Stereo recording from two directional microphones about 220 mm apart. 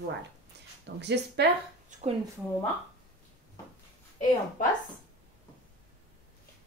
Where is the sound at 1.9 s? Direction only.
30° right (ahead or behind).